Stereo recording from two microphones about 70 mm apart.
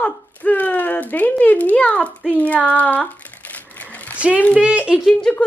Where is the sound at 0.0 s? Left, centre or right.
Left.